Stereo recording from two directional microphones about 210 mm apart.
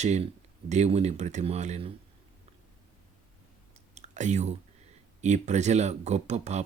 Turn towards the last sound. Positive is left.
turn(degrees=-35)  # may be behind; listen again after turning